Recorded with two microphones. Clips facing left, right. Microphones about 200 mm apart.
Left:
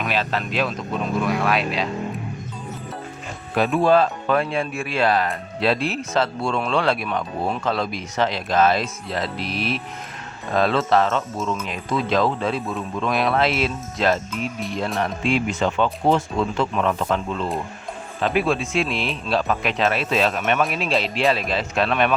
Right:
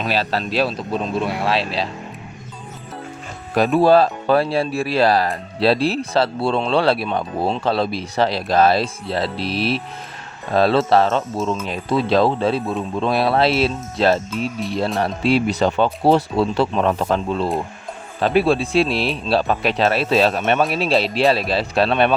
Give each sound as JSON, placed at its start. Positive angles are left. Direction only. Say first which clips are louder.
{"t": 0.0, "sound": "speech", "louder": "right 3 dB", "side_deg": -35}
{"t": 3.5, "sound": "speech", "louder": "right 4 dB", "side_deg": -40}